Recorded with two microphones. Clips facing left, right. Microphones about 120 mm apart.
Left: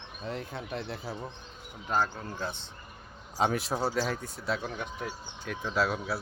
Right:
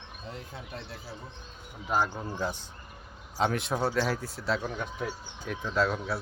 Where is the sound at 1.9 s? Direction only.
10° right (ahead or behind).